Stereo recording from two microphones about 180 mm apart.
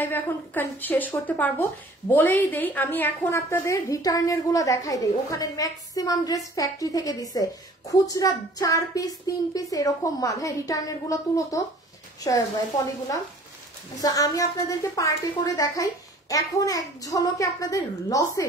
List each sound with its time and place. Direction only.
0.0 s a woman's voice: 10° left (ahead or behind)
14.0 s a woman's voice: 20° left (ahead or behind)